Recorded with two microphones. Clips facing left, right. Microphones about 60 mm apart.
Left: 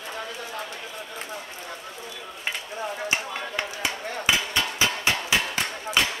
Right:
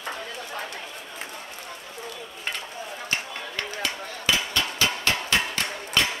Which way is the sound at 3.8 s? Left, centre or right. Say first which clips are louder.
Left 2 dB; centre.